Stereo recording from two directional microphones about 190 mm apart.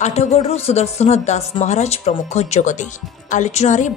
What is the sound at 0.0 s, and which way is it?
Speech, 35° left (ahead or behind).